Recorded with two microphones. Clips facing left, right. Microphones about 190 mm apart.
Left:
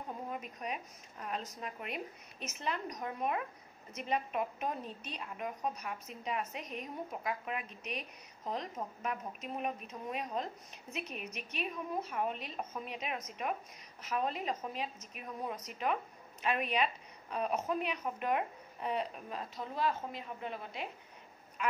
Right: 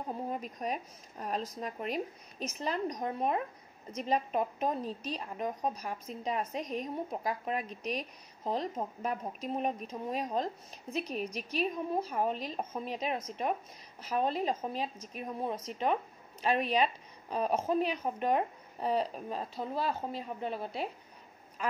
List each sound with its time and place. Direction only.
0.3 s a woman's voice: 35° right (ahead or behind)